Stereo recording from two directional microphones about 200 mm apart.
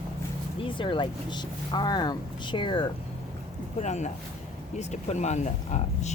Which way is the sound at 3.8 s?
35° left (ahead or behind).